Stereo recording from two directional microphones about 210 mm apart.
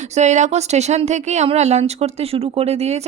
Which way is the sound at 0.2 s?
35° right (ahead or behind).